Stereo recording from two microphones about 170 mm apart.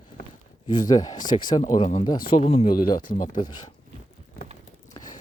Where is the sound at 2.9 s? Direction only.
55° left (ahead or behind).